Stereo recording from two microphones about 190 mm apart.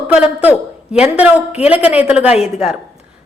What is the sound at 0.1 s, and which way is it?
A woman's voice, 10° right (ahead or behind).